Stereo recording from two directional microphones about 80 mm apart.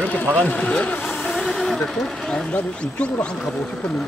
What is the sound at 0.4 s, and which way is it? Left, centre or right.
Speech, centre.